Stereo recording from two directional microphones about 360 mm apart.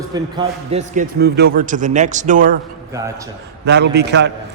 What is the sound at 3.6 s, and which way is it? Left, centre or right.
Speech, right.